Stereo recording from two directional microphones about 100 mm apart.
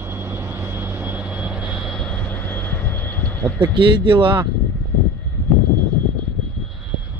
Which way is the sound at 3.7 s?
55° right (ahead or behind).